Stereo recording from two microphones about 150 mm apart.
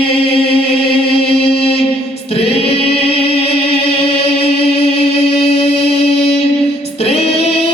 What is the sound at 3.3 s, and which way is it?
Chant, 40° left (ahead or behind).